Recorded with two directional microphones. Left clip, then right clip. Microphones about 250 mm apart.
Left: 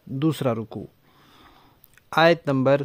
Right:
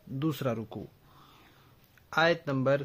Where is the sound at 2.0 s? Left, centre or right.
Left.